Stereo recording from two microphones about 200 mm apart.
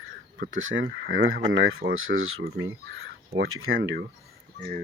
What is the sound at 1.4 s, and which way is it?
Speech, 75° right (ahead or behind).